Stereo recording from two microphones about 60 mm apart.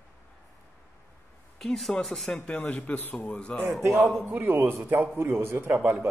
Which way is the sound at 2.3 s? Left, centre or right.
Centre.